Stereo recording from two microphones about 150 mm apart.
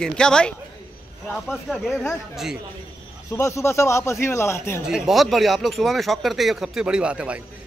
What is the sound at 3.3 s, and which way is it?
A man's voice, 20° left (ahead or behind).